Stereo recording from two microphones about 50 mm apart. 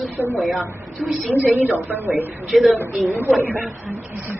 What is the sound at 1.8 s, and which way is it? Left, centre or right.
Speech, right.